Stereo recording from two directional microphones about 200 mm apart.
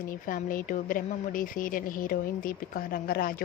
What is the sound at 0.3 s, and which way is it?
A woman's voice, 40° left (ahead or behind).